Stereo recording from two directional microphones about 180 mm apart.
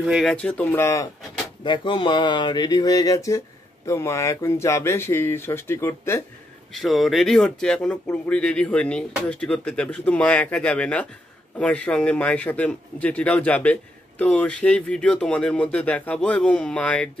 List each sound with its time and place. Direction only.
0.0 s speech: centre (ahead or behind)
1.6 s a man's voice: 25° left (ahead or behind)
6.7 s a man's voice: centre (ahead or behind)